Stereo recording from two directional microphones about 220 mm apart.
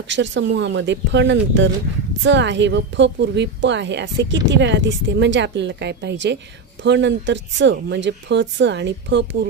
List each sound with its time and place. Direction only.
0.1 s a woman's voice: 55° right (ahead or behind)